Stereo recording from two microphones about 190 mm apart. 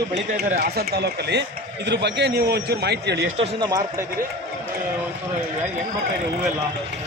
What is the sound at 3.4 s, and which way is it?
Speech, 20° right (ahead or behind).